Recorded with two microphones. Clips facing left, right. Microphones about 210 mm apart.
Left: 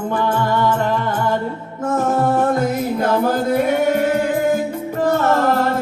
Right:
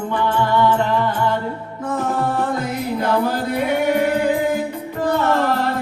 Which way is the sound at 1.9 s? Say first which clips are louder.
Left 4 dB; 45° left (ahead or behind).